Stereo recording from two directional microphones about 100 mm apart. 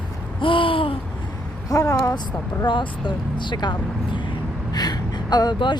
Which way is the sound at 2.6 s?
50° left (ahead or behind).